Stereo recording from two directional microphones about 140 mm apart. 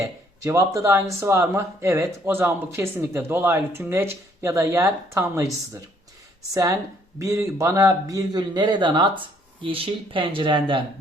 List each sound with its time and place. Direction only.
0.0 s a man's voice: 20° right (ahead or behind); by 10.8 s 35° right (ahead or behind)